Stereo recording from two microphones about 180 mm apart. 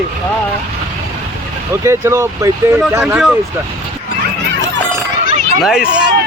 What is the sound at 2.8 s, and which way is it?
Speech, 5° right (ahead or behind).